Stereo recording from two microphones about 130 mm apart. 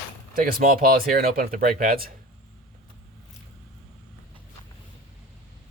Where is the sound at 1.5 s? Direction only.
90° right.